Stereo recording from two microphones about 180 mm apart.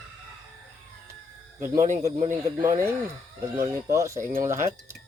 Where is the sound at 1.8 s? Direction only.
40° right (ahead or behind).